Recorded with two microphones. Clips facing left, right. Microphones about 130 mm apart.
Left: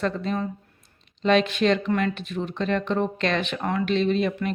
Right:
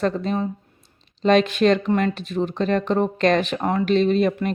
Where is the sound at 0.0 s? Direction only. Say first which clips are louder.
Right 4 dB; 40° right (ahead or behind).